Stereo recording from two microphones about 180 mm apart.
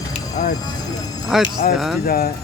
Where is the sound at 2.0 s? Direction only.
55° left (ahead or behind).